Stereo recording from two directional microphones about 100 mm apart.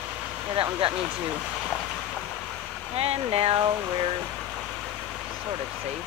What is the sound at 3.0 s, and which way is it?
Speech, 90° right.